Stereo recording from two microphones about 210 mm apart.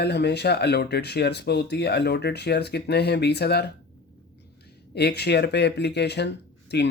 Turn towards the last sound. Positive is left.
turn(degrees=55)  # may be behind; listen again after turning